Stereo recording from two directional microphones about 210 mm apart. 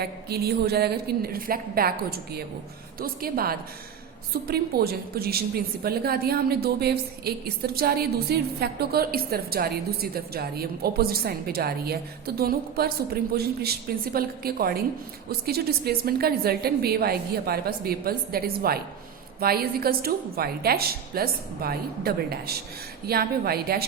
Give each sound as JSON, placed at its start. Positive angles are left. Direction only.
{"t": 0.0, "sound": "a woman's voice", "side_deg": -50}